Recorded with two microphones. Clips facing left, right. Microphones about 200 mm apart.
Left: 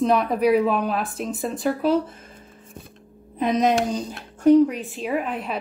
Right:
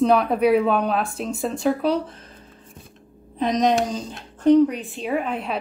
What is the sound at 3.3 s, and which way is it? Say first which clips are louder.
A woman's voice: even; 5° left (ahead or behind).